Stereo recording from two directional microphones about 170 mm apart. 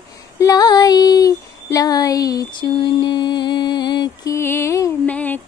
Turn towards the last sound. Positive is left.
turn(degrees=10)  # may be behind; listen again after turning